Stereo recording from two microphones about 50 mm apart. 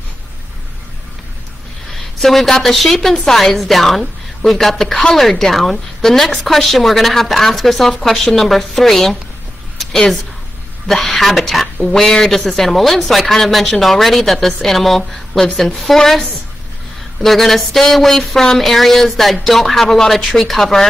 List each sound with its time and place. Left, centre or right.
1.9 s a woman's voice: centre
10.9 s a woman's voice: centre